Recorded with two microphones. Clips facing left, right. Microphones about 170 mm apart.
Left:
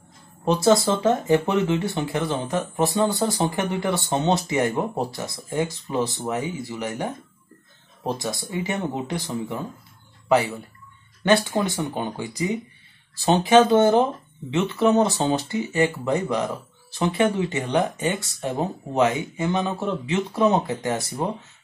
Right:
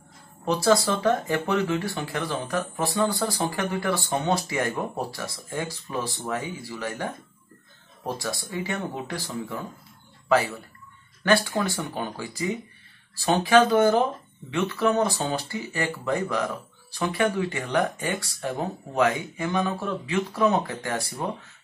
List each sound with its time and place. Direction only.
0.5 s speech: 20° left (ahead or behind)